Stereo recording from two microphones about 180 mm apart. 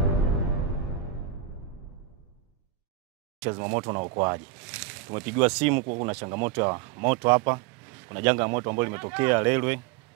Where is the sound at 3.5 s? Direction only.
20° right (ahead or behind).